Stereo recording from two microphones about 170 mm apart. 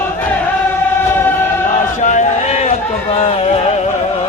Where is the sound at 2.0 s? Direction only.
45° left (ahead or behind).